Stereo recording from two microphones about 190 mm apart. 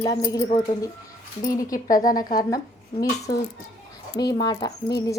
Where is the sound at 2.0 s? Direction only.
45° left (ahead or behind).